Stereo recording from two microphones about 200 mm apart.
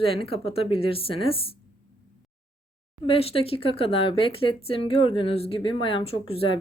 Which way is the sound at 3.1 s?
30° left (ahead or behind).